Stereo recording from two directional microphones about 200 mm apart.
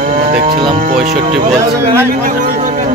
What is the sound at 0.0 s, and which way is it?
Cattle, 40° right (ahead or behind).